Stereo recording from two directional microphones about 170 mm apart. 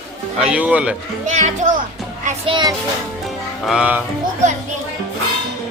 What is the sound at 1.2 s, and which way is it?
Speech, 45° right (ahead or behind).